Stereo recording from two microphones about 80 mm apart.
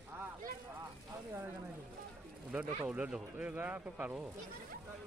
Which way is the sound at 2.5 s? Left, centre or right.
Centre.